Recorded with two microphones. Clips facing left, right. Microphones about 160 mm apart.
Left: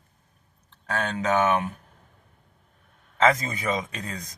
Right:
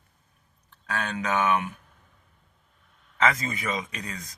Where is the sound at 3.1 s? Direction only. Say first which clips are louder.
Left 4 dB; 25° left (ahead or behind).